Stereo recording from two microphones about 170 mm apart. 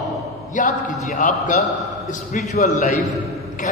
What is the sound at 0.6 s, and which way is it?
A man's voice, 50° left (ahead or behind).